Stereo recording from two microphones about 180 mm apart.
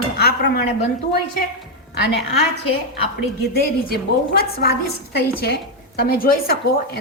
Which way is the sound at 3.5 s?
55° left (ahead or behind).